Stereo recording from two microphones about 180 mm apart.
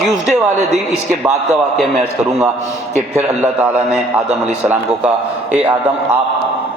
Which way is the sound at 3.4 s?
5° right (ahead or behind).